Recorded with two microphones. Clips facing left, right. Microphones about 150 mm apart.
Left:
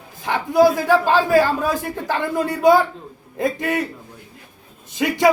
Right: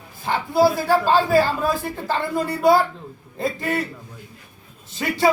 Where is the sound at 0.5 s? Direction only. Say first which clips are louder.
Left 3 dB; 20° left (ahead or behind).